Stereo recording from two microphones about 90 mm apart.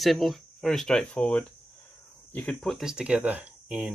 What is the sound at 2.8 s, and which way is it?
Speech, 10° right (ahead or behind).